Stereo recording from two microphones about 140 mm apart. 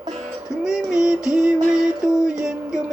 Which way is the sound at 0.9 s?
5° right (ahead or behind).